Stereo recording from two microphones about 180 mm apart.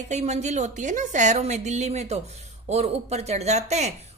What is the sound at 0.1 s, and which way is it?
A woman's voice, 40° right (ahead or behind).